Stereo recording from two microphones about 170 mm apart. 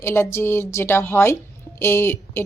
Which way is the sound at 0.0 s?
15° left (ahead or behind).